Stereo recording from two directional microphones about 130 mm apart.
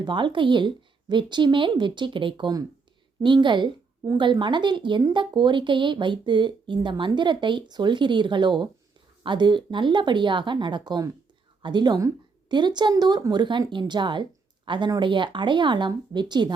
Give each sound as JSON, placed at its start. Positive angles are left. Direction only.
{"t": 0.0, "sound": "a woman's voice", "side_deg": -35}